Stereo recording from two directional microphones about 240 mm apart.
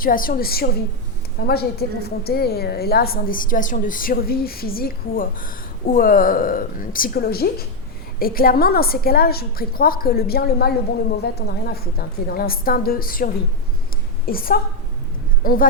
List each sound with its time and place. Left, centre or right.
0.0 s a woman's voice: left